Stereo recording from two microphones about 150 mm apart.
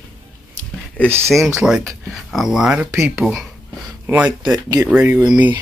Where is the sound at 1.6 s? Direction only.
5° right (ahead or behind).